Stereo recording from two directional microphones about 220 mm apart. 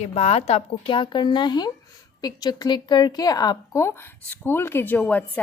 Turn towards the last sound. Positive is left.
turn(degrees=5)  # may be behind; listen again after turning